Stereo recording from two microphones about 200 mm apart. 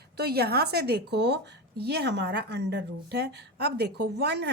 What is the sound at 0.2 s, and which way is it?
A woman's voice, 55° right (ahead or behind).